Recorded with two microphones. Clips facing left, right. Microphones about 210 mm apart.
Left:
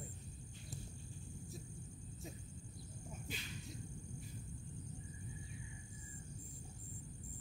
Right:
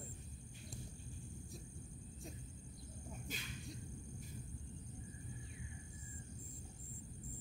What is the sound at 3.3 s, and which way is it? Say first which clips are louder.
Cricket: even; 45° right (ahead or behind).